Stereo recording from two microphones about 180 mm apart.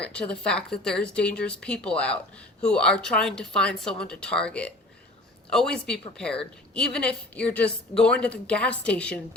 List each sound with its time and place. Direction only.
0.0 s a woman's voice: 5° left (ahead or behind)